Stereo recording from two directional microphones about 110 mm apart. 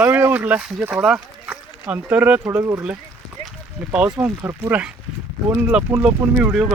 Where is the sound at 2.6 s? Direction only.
25° right (ahead or behind).